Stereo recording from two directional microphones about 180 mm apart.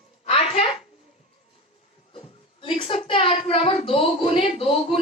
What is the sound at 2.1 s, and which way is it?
A woman's voice, 30° left (ahead or behind).